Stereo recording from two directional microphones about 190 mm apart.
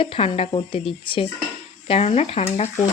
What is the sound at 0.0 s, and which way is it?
Speech, 30° left (ahead or behind).